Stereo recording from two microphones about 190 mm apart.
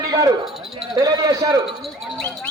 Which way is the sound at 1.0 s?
20° right (ahead or behind).